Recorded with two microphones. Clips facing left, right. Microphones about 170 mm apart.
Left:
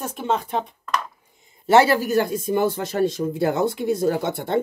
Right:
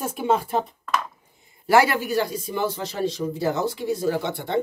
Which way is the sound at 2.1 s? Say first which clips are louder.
Left 4 dB; 50° left (ahead or behind).